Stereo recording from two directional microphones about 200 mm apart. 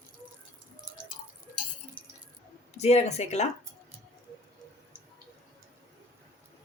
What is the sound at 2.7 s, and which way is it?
Speech, 35° left (ahead or behind).